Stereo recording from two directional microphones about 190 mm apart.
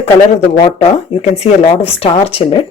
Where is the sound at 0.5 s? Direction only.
25° left (ahead or behind).